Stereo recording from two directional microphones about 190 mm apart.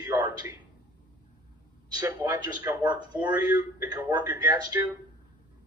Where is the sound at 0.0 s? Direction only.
20° right (ahead or behind).